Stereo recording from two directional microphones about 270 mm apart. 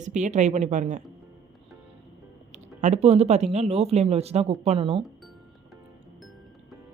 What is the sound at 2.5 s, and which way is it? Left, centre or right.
A woman's voice, right.